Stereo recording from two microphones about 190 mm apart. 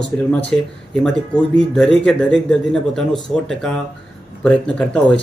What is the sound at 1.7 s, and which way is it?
Speech, 5° left (ahead or behind).